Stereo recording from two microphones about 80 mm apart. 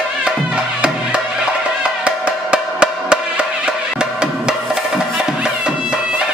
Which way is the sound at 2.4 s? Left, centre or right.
Centre.